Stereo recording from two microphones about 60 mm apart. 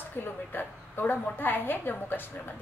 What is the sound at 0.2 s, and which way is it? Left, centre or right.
A woman's voice, left.